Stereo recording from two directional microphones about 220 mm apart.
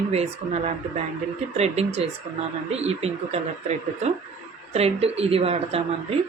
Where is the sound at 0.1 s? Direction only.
30° right (ahead or behind).